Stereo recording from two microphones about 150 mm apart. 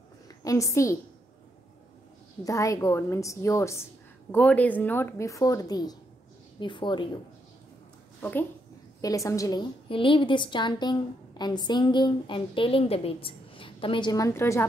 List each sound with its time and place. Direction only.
0.4 s a woman's voice: 20° left (ahead or behind)
2.4 s a woman's voice: 20° left (ahead or behind)
8.2 s a woman's voice: 15° left (ahead or behind)